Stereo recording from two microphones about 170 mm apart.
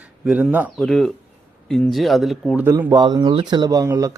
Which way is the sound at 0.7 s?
Centre (ahead or behind).